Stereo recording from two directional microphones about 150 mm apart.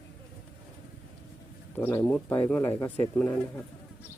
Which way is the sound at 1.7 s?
10° left (ahead or behind).